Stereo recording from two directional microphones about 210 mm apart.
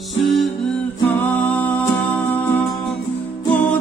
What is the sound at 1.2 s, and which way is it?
Music, 5° left (ahead or behind).